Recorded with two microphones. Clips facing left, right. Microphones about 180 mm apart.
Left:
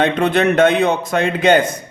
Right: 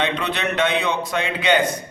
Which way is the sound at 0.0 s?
50° left (ahead or behind).